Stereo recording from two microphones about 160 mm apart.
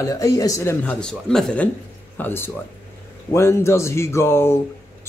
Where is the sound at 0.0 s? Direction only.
20° left (ahead or behind).